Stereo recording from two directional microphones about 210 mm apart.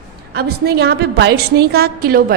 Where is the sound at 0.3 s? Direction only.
50° right (ahead or behind).